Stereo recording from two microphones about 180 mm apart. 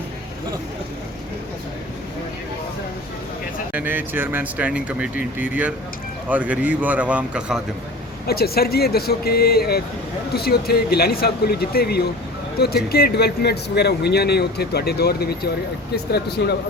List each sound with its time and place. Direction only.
3.7 s speech: 10° right (ahead or behind)
8.3 s speech: 60° left (ahead or behind)
16.4 s speech: 65° left (ahead or behind)